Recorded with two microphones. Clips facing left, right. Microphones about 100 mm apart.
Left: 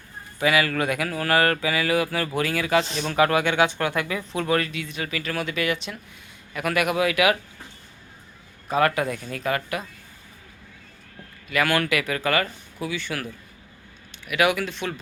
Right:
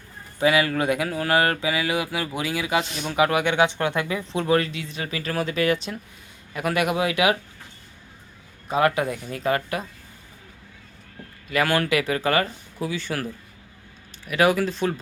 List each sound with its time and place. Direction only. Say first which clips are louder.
0.3 s speech: right 1 dB; 25° right (ahead or behind)
8.6 s speech: right 1 dB; 20° right (ahead or behind)
11.4 s speech: right 1 dB; 30° right (ahead or behind)
14.3 s speech: right 2 dB; 35° right (ahead or behind)